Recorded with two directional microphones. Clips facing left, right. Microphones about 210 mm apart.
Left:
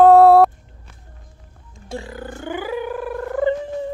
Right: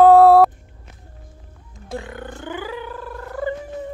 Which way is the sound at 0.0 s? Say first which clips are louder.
Even; centre (ahead or behind).